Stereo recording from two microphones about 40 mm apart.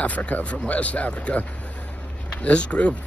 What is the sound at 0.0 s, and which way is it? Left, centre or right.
Speech, left.